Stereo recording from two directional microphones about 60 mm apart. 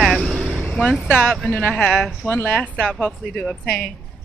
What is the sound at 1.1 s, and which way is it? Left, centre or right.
Speech, centre.